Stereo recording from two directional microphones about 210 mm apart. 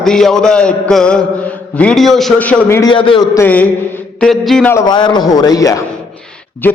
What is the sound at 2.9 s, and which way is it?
Speech, 25° left (ahead or behind).